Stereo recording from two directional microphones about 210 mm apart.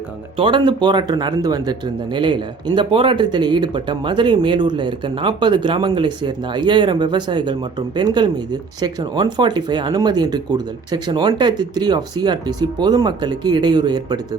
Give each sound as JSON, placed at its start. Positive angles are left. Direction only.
{"t": 0.3, "sound": "speech", "side_deg": -25}